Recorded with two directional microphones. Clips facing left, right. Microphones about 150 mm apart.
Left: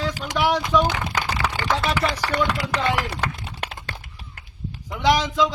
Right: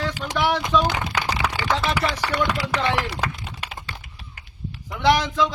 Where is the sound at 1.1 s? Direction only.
10° right (ahead or behind).